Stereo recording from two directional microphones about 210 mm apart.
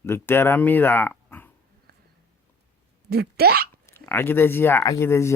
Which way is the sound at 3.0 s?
50° right (ahead or behind).